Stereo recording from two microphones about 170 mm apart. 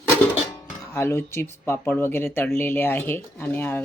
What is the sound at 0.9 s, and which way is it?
Speech, 15° left (ahead or behind).